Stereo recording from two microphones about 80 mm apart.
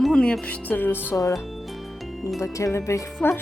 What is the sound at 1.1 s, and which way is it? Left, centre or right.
Speech, left.